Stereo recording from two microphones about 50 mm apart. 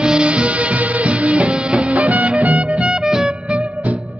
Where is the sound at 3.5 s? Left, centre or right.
Right.